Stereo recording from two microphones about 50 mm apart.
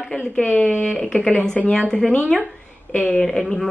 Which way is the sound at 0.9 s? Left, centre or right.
Centre.